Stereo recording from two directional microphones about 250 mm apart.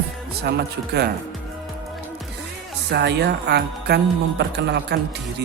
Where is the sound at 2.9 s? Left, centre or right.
Right.